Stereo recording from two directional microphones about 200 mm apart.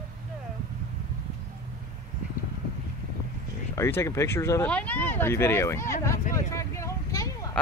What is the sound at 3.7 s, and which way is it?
Speech, 15° left (ahead or behind).